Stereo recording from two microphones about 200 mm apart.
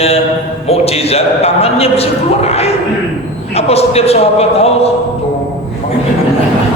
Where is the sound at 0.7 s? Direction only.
30° left (ahead or behind).